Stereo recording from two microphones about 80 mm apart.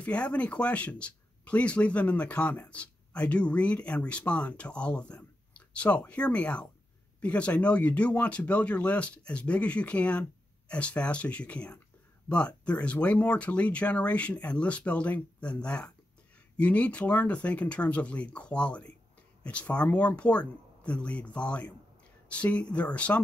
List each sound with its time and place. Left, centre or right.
0.0 s speech: centre